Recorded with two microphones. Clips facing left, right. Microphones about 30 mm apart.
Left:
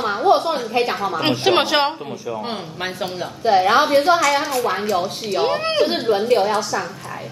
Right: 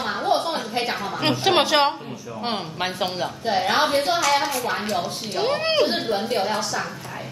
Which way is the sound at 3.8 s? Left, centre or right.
Left.